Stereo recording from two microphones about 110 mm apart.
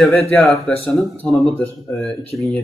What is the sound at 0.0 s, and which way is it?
Speech, centre (ahead or behind).